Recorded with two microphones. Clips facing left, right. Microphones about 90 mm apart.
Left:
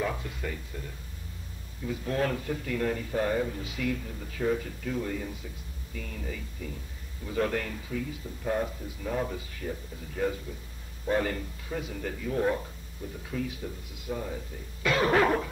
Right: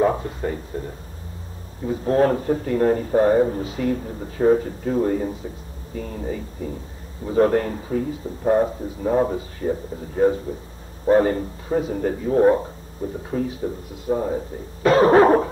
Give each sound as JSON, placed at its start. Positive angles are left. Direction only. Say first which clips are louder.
{"t": 0.0, "sound": "a man's voice", "louder": "right 12 dB", "side_deg": -35}